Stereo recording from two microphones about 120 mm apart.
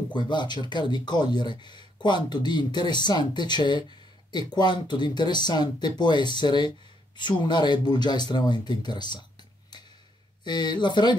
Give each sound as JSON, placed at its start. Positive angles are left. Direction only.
{"t": 0.1, "sound": "speech", "side_deg": 40}
{"t": 10.4, "sound": "speech", "side_deg": 35}